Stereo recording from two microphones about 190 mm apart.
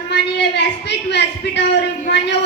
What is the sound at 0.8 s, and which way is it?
Speech, 65° left (ahead or behind).